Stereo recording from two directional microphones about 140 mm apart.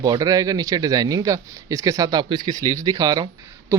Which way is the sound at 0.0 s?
25° right (ahead or behind).